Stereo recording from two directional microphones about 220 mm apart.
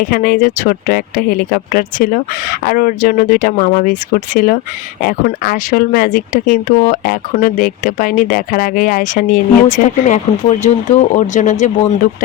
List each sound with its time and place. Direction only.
0.0 s speech: 40° left (ahead or behind)